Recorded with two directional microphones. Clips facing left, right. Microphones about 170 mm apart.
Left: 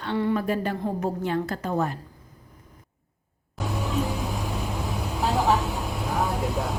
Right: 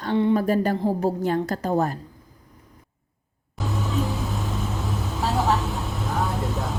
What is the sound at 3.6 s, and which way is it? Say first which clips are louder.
Music: right 1 dB; centre (ahead or behind).